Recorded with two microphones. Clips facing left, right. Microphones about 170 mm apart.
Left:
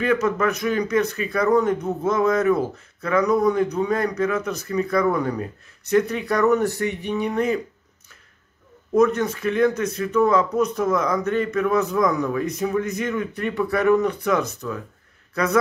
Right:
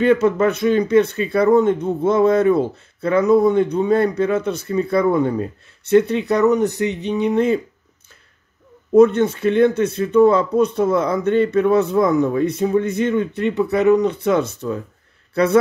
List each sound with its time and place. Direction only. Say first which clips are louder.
0.0 s speech: right 6 dB; 30° right (ahead or behind)
8.9 s speech: right 6 dB; 30° right (ahead or behind)